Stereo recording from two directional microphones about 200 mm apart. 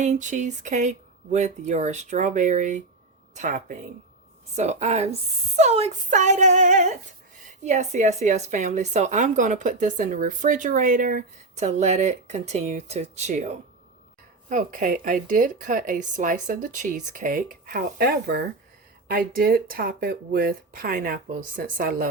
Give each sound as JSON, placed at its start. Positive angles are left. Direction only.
{"t": 0.0, "sound": "speech", "side_deg": -35}